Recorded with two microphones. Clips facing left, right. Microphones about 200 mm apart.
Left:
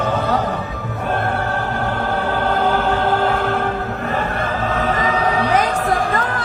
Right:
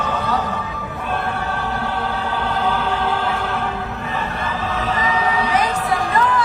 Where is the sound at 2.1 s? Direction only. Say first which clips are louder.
Left 4 dB; 50° left (ahead or behind).